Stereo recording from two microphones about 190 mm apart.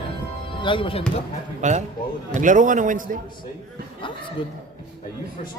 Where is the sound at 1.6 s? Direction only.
40° right (ahead or behind).